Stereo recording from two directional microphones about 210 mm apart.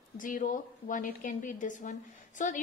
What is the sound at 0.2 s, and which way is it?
A woman's voice, 40° left (ahead or behind).